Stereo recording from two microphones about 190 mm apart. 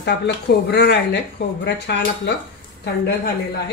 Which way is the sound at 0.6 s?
60° left (ahead or behind).